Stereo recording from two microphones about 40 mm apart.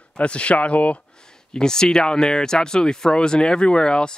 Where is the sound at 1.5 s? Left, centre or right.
Centre.